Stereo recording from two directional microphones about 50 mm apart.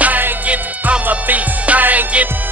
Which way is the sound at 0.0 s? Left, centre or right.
Right.